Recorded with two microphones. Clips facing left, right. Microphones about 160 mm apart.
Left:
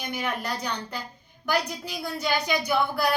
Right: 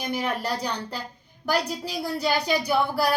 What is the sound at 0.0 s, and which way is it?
A woman's voice, 35° right (ahead or behind).